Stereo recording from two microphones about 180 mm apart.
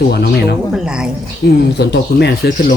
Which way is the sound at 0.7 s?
5° right (ahead or behind).